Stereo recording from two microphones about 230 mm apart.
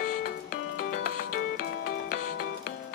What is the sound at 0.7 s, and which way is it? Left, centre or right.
Music, left.